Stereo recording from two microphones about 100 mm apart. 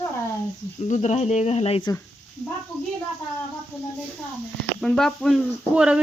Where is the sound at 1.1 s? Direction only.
90° left.